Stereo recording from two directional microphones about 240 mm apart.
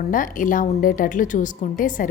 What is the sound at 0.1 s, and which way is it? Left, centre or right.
A woman's voice, left.